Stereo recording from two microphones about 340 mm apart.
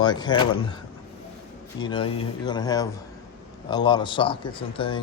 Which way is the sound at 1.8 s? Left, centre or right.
Centre.